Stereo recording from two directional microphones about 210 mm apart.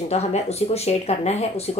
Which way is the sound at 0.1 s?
30° left (ahead or behind).